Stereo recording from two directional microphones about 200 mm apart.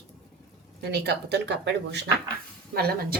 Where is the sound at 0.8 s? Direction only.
55° right (ahead or behind).